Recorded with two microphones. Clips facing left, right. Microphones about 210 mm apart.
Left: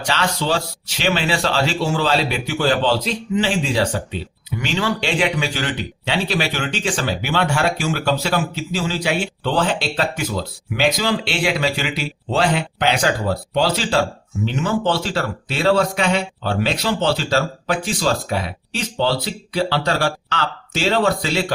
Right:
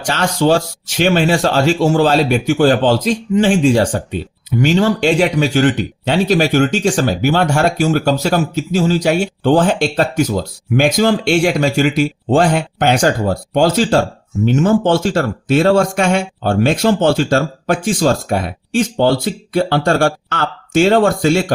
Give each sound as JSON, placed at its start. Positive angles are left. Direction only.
{"t": 0.0, "sound": "speech", "side_deg": -45}